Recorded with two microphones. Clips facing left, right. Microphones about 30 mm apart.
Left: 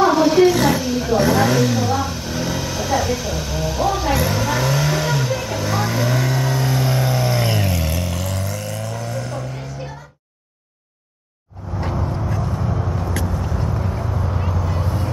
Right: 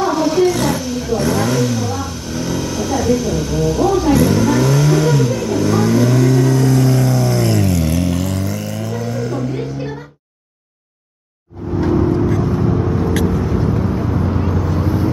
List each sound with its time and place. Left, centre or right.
0.0 s wild animals: centre
7.8 s vehicle: centre
9.6 s music: centre
11.9 s vehicle: centre